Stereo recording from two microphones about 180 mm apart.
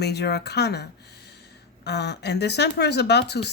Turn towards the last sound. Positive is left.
turn(degrees=65)  # may be behind; listen again after turning